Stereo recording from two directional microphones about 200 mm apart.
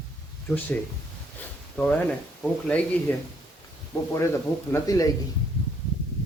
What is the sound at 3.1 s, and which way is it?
Speech, 10° left (ahead or behind).